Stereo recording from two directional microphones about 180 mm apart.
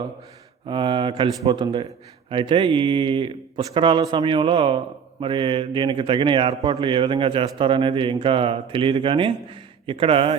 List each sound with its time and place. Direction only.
0.6 s a man's voice: 25° right (ahead or behind)